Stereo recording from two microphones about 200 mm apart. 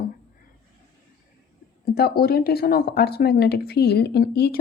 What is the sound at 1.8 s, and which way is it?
Speech, 50° left (ahead or behind).